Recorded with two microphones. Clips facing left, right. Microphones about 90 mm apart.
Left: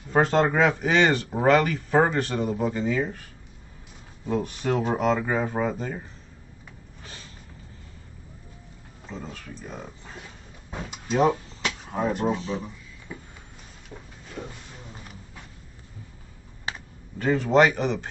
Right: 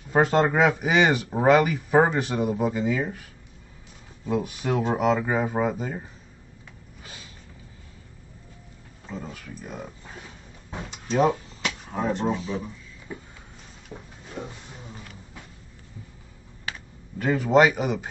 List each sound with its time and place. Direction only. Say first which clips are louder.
0.1 s speech: even; 5° right (ahead or behind)
4.3 s speech: even; 5° right (ahead or behind)
7.0 s a sound: even; 5° right (ahead or behind)
9.1 s speech: right 1 dB; 5° right (ahead or behind)
11.1 s a sound: even; 5° right (ahead or behind)
11.9 s speech: left 1 dB; 10° left (ahead or behind)
12.4 s speech: even; 5° right (ahead or behind)
14.4 s speech: right 1 dB; 20° right (ahead or behind)
17.2 s speech: right 1 dB; 5° right (ahead or behind)